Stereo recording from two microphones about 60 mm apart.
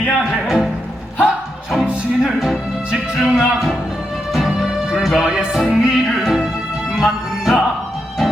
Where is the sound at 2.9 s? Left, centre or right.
Centre.